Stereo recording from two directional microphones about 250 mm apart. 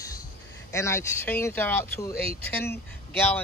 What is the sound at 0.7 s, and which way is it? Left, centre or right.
Speech, centre.